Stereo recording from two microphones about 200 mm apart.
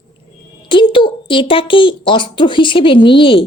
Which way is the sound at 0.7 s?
25° left (ahead or behind).